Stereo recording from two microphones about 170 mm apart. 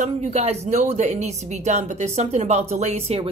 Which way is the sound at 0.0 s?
40° right (ahead or behind).